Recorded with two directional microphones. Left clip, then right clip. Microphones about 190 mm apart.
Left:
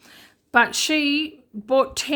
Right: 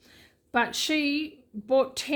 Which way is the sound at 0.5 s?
20° left (ahead or behind).